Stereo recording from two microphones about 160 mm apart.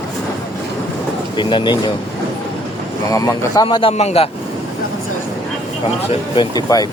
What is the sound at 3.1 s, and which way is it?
Speech, 20° left (ahead or behind).